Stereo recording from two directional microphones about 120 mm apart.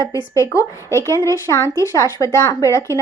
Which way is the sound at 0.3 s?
25° left (ahead or behind).